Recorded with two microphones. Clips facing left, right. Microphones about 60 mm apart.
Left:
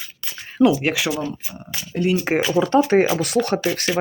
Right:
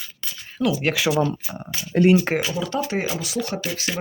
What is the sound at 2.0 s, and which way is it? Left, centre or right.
Speech, right.